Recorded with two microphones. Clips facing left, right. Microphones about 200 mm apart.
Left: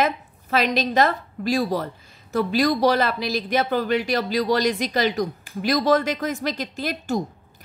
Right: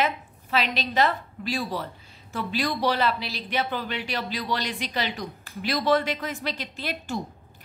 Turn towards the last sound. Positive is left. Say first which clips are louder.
# left 6 dB
turn(degrees=45)  # may be behind; listen again after turning